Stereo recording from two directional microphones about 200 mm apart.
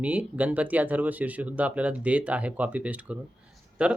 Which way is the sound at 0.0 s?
5° right (ahead or behind).